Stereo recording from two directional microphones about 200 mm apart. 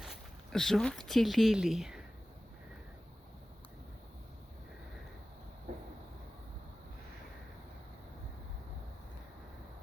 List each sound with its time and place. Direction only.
0.0 s speech: centre (ahead or behind)
5.7 s vehicle: 40° right (ahead or behind)